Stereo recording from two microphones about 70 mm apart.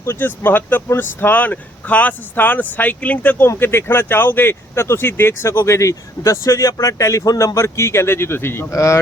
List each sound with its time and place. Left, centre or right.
0.2 s speech: left
8.7 s speech: left